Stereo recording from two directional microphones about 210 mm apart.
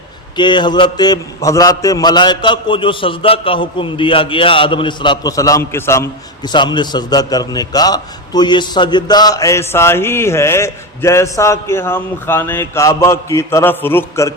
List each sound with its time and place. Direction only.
0.3 s a man's voice: 20° left (ahead or behind)